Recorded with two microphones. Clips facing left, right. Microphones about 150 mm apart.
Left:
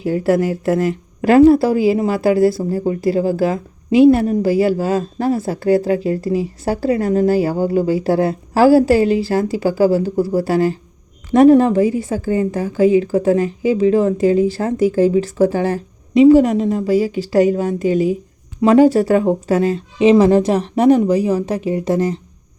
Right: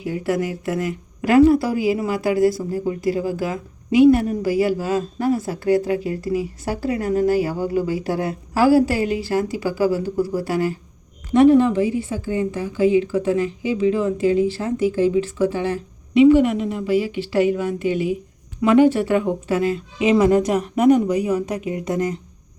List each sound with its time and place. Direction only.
0.0 s a woman's voice: 35° left (ahead or behind)
11.3 s a woman's voice: 40° left (ahead or behind)